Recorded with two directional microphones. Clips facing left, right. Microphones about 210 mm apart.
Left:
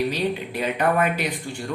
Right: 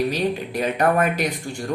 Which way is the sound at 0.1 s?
45° right (ahead or behind).